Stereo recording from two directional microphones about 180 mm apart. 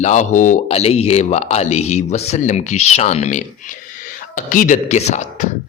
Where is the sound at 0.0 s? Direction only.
40° left (ahead or behind).